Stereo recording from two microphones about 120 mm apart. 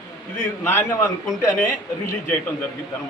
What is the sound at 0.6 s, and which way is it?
A man's voice, 20° left (ahead or behind).